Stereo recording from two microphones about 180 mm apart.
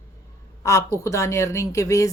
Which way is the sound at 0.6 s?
15° left (ahead or behind).